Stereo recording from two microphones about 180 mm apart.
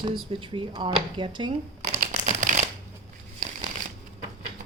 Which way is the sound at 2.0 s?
40° right (ahead or behind).